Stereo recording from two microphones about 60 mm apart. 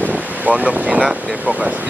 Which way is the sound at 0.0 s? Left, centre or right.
Right.